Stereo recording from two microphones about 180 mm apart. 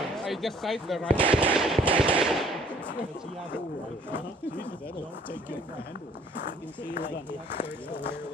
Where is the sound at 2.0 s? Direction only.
5° right (ahead or behind).